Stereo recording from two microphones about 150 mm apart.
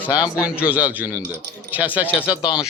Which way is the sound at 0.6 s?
10° right (ahead or behind).